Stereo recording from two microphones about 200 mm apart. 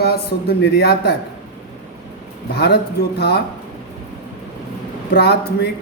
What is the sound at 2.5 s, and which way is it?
Speech, 55° left (ahead or behind).